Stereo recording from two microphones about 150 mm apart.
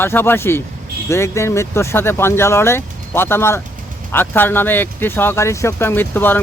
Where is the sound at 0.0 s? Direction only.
15° left (ahead or behind).